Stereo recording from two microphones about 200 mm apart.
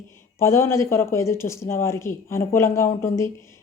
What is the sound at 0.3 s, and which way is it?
Speech, 15° left (ahead or behind).